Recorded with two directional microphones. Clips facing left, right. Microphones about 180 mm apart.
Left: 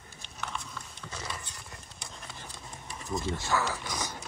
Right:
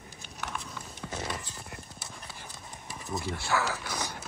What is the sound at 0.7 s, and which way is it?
Clip-clop, 20° right (ahead or behind).